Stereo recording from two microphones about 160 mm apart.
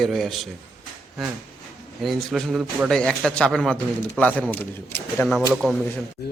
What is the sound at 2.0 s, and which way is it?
A man's voice, centre (ahead or behind).